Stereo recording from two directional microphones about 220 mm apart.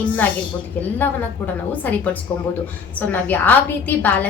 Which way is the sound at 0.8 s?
10° left (ahead or behind).